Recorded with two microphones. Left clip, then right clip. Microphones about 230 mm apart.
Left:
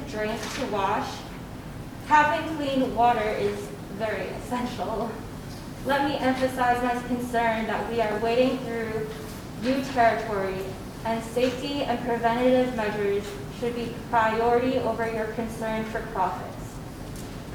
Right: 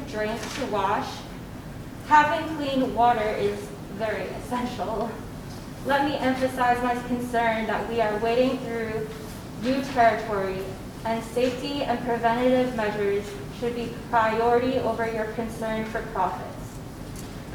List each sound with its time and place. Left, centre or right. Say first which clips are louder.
0.1 s a woman's voice: right 1 dB; centre
4.8 s speech: right 1 dB; centre
5.9 s a woman's voice: right 1 dB; centre